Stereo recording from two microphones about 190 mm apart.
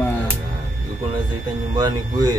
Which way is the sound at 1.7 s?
20° right (ahead or behind).